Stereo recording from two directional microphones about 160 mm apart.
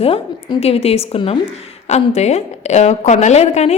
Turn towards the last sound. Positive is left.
turn(degrees=40)  # may be behind; listen again after turning